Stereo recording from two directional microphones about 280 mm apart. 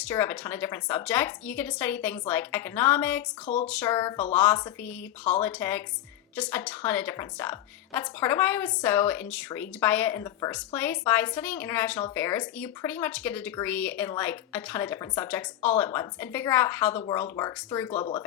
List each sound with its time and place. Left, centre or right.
0.0 s a woman's voice: centre